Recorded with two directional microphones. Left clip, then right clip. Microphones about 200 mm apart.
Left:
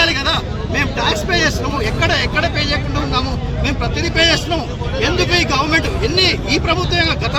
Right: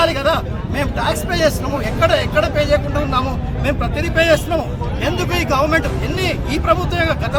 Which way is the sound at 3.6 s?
20° right (ahead or behind).